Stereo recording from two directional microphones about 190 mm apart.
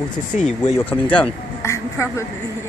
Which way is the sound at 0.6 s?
10° left (ahead or behind).